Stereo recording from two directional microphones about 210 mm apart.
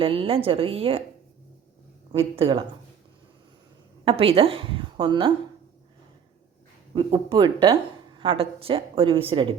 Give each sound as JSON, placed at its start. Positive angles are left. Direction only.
{"t": 0.0, "sound": "a woman's voice", "side_deg": -25}
{"t": 2.1, "sound": "a woman's voice", "side_deg": -25}
{"t": 4.0, "sound": "a woman's voice", "side_deg": -25}
{"t": 6.9, "sound": "a woman's voice", "side_deg": -25}